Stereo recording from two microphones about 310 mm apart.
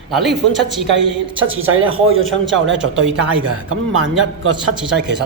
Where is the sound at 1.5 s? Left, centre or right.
Right.